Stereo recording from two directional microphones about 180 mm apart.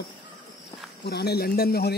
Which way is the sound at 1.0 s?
65° left (ahead or behind).